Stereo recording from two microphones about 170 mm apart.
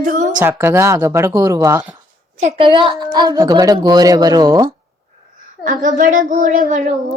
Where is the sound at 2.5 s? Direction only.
30° right (ahead or behind).